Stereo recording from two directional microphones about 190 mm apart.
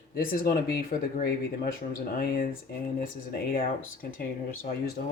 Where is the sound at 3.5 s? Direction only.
50° left (ahead or behind).